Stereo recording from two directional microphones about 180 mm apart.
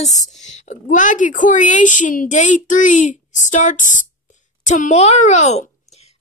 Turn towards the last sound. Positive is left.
turn(degrees=35)  # may be behind; listen again after turning